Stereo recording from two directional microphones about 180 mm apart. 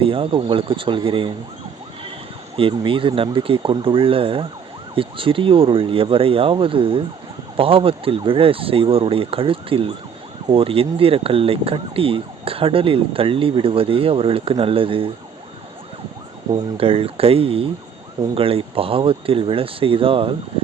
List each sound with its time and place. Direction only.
0.0 s speech: 30° right (ahead or behind)
2.6 s speech: 30° right (ahead or behind)
16.7 s speech: 30° right (ahead or behind)